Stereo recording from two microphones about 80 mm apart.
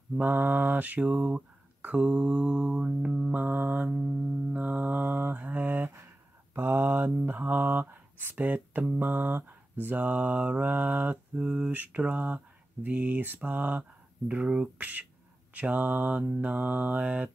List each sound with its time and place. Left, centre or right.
0.2 s speech: right
4.5 s music: centre
6.5 s speech: right
11.4 s speech: centre